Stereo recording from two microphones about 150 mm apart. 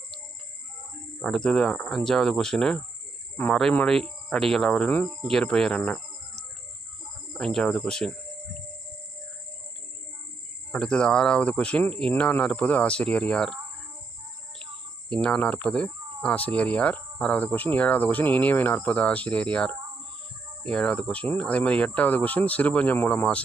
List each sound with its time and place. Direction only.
1.2 s speech: 5° left (ahead or behind)
7.3 s speech: 5° left (ahead or behind)
10.7 s speech: 5° left (ahead or behind)
15.1 s speech: 5° left (ahead or behind)